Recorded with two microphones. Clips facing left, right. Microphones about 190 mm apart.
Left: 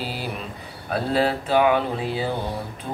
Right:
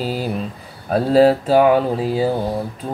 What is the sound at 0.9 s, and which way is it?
Speech, 40° right (ahead or behind).